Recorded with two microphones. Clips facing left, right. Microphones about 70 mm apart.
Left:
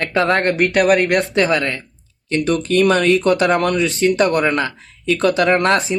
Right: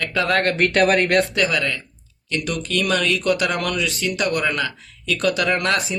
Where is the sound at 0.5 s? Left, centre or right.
Centre.